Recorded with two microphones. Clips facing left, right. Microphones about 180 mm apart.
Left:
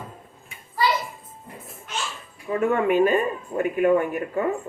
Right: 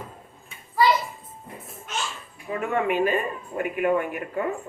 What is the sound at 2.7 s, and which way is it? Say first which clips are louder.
Speech: left 3 dB; 45° left (ahead or behind).